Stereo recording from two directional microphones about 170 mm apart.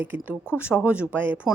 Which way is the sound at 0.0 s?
10° right (ahead or behind).